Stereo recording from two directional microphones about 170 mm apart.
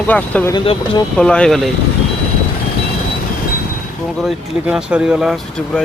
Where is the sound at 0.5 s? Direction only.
30° left (ahead or behind).